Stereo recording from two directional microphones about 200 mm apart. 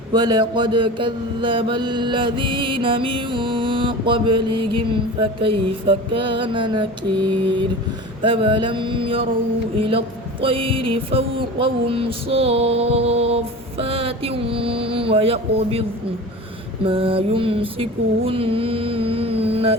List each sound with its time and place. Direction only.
0.1 s mantra: 20° right (ahead or behind)
16.8 s mantra: 25° right (ahead or behind)